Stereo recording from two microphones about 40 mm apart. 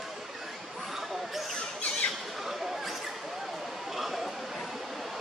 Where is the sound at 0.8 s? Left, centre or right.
Centre.